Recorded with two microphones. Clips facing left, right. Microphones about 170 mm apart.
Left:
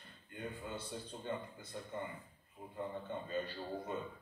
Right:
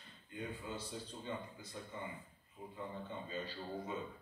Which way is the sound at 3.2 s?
55° left (ahead or behind).